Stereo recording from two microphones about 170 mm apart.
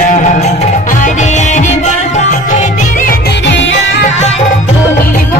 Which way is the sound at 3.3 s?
90° left.